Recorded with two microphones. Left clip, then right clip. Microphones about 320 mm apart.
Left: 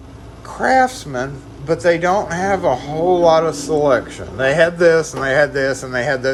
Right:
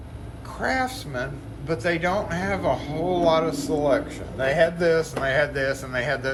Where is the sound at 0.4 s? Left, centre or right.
Centre.